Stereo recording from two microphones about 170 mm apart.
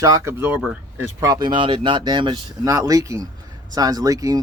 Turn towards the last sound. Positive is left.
turn(degrees=-20)  # may be behind; listen again after turning